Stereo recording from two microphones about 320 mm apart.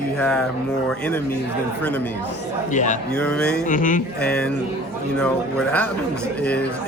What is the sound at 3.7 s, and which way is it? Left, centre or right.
Speech, left.